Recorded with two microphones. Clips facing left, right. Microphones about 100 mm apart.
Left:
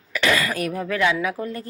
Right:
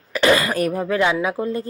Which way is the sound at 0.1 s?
35° right (ahead or behind).